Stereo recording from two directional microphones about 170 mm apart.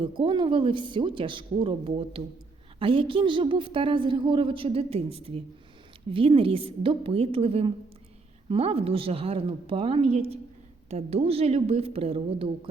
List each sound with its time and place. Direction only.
0.0 s a woman's voice: 30° right (ahead or behind)